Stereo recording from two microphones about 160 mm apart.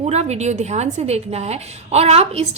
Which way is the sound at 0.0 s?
45° right (ahead or behind).